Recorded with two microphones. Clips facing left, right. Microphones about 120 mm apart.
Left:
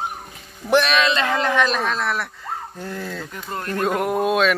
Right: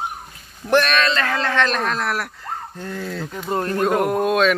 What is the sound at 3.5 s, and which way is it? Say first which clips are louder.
Speech: right 6 dB; 30° right (ahead or behind).